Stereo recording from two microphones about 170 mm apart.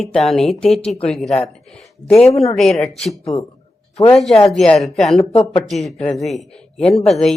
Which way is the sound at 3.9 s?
35° left (ahead or behind).